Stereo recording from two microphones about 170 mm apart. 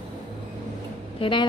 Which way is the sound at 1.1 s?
30° left (ahead or behind).